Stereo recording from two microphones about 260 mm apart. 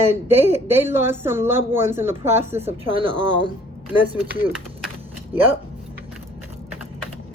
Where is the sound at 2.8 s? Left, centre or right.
Centre.